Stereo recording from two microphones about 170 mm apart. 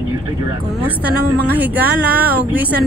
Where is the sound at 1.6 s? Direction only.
10° right (ahead or behind).